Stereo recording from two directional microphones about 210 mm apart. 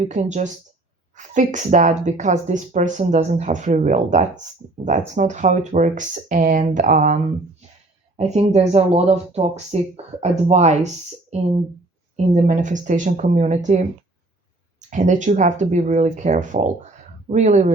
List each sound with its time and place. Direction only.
0.0 s speech: 35° right (ahead or behind)
14.8 s speech: 35° right (ahead or behind)